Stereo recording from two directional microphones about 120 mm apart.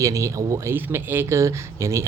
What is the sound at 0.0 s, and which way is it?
Speech, 25° right (ahead or behind).